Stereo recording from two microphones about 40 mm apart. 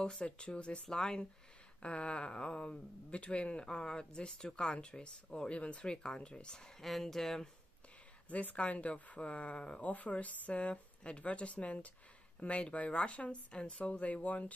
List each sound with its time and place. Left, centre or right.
0.1 s speech: centre
6.8 s speech: centre
8.3 s speech: left